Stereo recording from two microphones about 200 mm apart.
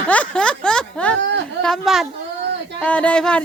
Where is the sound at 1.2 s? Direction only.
60° right (ahead or behind).